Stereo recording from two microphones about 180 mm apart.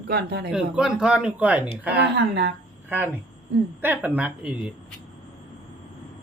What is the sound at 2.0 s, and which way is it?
Speech, 70° right (ahead or behind).